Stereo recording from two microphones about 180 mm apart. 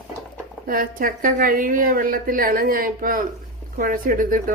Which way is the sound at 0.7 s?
50° right (ahead or behind).